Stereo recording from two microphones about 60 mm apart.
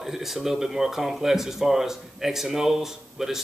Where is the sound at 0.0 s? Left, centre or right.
Centre.